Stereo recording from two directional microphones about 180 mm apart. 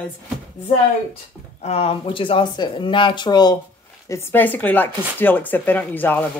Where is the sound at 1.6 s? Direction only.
35° left (ahead or behind).